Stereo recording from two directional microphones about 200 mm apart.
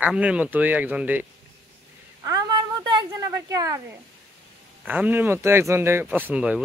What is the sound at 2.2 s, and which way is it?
Speech, 20° right (ahead or behind).